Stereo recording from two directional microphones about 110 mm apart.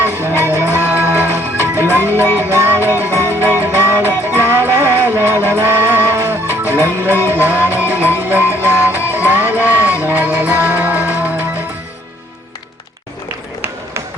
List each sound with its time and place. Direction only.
0.0 s music: 20° right (ahead or behind)